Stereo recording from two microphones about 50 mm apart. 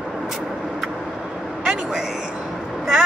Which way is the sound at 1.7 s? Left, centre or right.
Centre.